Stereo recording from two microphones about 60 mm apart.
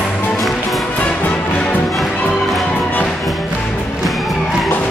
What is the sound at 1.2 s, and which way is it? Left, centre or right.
Music, left.